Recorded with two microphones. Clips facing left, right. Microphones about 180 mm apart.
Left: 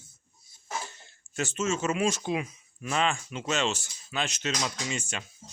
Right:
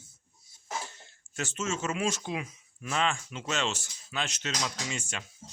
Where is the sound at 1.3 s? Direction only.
10° left (ahead or behind).